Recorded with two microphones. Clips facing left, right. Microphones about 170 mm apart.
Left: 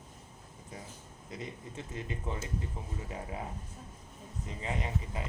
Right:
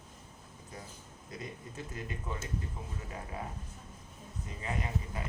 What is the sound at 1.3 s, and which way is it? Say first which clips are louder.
Speech: left 1 dB; 25° left (ahead or behind).